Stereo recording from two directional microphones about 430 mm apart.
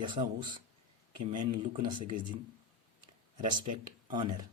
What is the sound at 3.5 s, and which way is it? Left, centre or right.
Speech, centre.